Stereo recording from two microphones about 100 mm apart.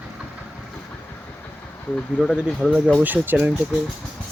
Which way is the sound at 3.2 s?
20° right (ahead or behind).